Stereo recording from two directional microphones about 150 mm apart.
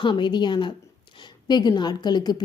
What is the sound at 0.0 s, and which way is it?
A woman's voice, 30° left (ahead or behind).